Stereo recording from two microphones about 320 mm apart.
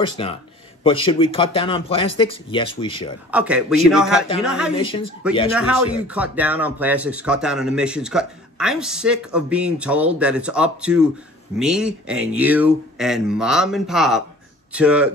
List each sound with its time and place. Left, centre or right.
0.2 s speech: centre
3.3 s speech: centre
4.7 s speech: centre
5.5 s speech: centre